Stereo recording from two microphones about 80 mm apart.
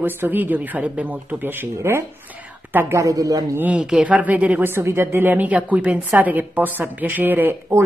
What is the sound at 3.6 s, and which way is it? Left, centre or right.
Speech, centre.